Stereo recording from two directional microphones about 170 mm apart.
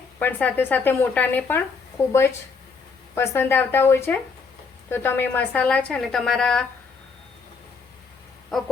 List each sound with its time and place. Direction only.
0.2 s a woman's voice: 10° left (ahead or behind)
3.2 s a woman's voice: 10° left (ahead or behind)
8.5 s a sound: centre (ahead or behind)